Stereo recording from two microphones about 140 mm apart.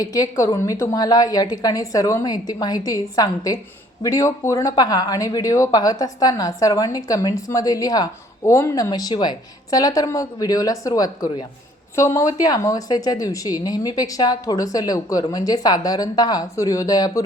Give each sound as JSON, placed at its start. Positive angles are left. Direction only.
{"t": 0.0, "sound": "speech", "side_deg": 25}